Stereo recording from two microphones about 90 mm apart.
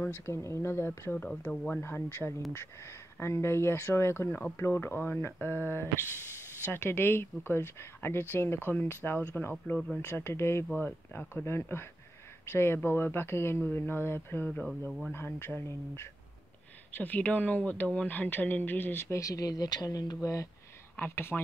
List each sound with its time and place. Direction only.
0.0 s speech: 25° left (ahead or behind)
1.8 s speech: 25° left (ahead or behind)
14.5 s speech: 10° left (ahead or behind)
15.1 s speech: 25° left (ahead or behind)
19.1 s speech: 40° left (ahead or behind)
20.9 s speech: 20° left (ahead or behind)